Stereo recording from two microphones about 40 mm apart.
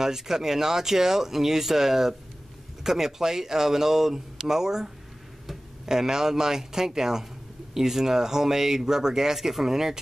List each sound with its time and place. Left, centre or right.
0.0 s speech: centre